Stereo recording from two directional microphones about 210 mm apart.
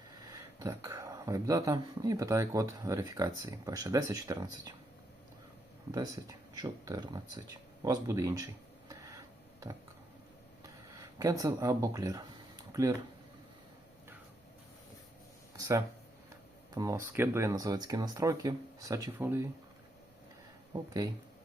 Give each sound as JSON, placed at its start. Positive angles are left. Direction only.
{"t": 0.6, "sound": "speech", "side_deg": -15}
{"t": 5.9, "sound": "speech", "side_deg": -15}
{"t": 11.2, "sound": "speech", "side_deg": -15}
{"t": 15.5, "sound": "speech", "side_deg": -15}